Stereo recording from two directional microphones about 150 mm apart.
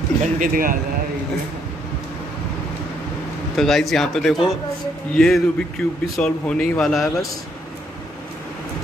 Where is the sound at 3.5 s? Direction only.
Centre (ahead or behind).